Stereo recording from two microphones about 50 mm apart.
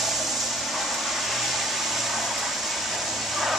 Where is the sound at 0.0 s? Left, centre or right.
Centre.